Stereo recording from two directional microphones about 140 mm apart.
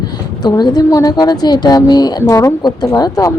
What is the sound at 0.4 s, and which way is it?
Speech, 30° left (ahead or behind).